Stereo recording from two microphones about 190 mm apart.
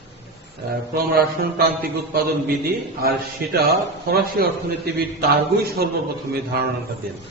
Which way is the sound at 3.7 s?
55° right (ahead or behind).